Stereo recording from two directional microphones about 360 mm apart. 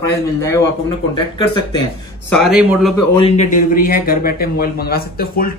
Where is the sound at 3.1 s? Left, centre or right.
Centre.